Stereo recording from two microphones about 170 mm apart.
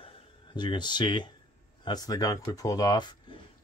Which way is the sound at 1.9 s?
20° left (ahead or behind).